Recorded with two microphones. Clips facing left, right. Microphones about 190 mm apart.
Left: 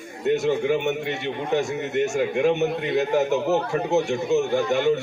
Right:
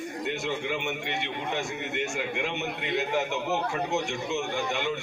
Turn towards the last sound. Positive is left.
turn(degrees=40)  # may be behind; listen again after turning